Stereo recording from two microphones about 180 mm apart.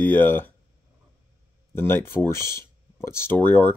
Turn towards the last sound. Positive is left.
turn(degrees=10)  # may be behind; listen again after turning